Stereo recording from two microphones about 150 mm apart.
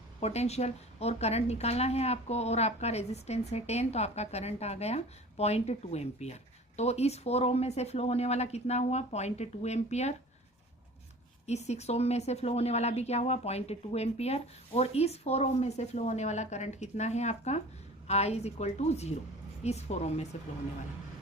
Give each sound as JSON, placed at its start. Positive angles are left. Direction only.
{"t": 0.2, "sound": "speech", "side_deg": 45}
{"t": 11.4, "sound": "speech", "side_deg": 45}